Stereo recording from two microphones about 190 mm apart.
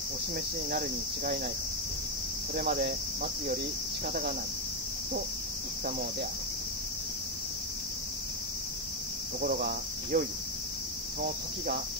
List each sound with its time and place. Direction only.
0.7 s speech: 50° right (ahead or behind)
2.5 s speech: 50° right (ahead or behind)
9.4 s speech: 50° right (ahead or behind)